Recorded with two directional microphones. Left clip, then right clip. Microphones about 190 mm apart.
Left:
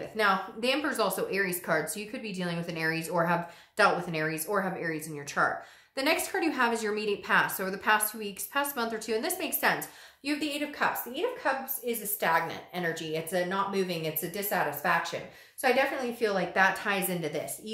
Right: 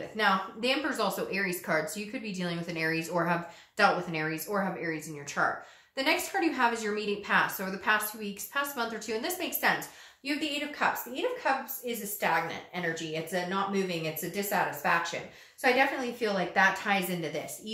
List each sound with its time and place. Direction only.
0.2 s a woman's voice: 35° left (ahead or behind)